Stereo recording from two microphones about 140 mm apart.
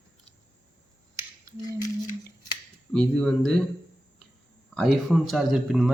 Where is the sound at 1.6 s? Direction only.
25° left (ahead or behind).